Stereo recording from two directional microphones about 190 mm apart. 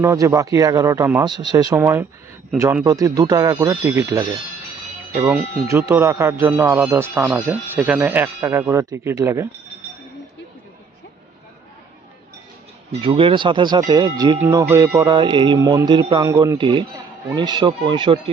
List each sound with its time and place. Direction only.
0.0 s speech: 15° right (ahead or behind)
13.0 s speech: 30° right (ahead or behind)